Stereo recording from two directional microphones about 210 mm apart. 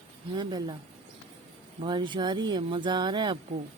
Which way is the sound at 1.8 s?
20° right (ahead or behind).